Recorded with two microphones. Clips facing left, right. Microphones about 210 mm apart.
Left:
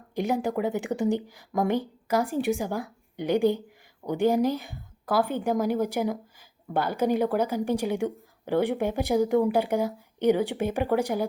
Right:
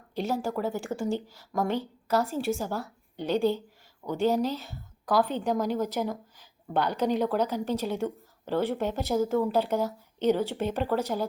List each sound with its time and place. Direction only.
0.1 s speech: 15° left (ahead or behind)